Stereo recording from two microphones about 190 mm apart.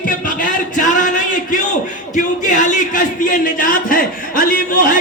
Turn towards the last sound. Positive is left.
turn(degrees=45)  # may be behind; listen again after turning